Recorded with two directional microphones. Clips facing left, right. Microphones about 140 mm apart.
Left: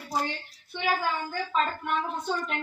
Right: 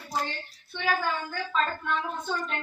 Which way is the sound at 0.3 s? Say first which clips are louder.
Left 2 dB; 15° left (ahead or behind).